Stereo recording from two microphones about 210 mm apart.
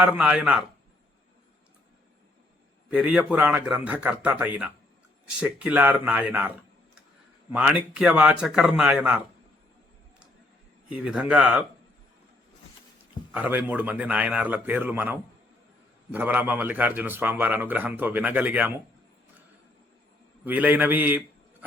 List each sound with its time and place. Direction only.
0.0 s a man's voice: 5° right (ahead or behind)
2.9 s a man's voice: 5° right (ahead or behind)
7.5 s a man's voice: 5° right (ahead or behind)
10.8 s a man's voice: 5° right (ahead or behind)
13.3 s a man's voice: 10° right (ahead or behind)
20.4 s a man's voice: 10° right (ahead or behind)